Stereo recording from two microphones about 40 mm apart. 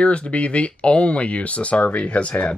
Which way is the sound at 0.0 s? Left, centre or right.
Left.